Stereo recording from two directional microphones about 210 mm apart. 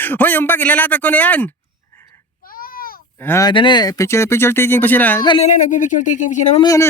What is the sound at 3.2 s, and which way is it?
Speech, 10° left (ahead or behind).